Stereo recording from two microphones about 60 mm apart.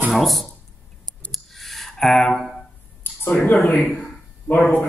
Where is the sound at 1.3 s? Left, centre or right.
Centre.